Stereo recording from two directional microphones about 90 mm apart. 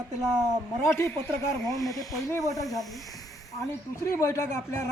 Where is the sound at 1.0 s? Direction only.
30° left (ahead or behind).